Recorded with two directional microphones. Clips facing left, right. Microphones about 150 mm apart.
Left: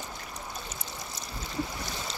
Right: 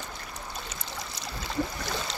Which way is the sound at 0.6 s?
75° right (ahead or behind).